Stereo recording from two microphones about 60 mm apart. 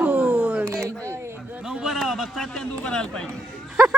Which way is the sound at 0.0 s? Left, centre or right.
Right.